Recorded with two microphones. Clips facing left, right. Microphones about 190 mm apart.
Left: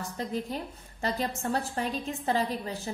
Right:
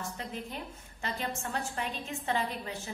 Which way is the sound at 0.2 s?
35° left (ahead or behind).